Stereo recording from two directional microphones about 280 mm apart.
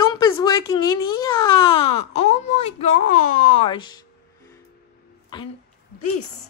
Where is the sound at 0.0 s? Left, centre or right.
Centre.